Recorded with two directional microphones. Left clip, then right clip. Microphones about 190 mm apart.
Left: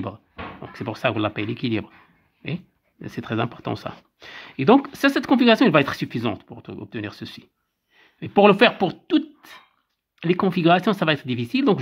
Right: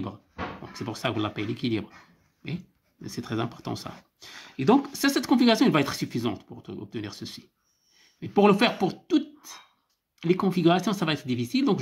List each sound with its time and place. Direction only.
0.7 s speech: 35° left (ahead or behind)